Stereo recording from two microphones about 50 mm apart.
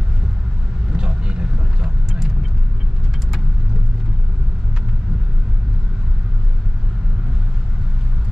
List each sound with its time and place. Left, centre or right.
0.9 s vehicle: centre